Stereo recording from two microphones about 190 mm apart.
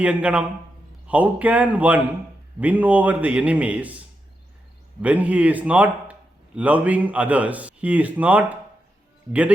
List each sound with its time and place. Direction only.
0.0 s a man's voice: 5° right (ahead or behind)
5.0 s a man's voice: 5° right (ahead or behind)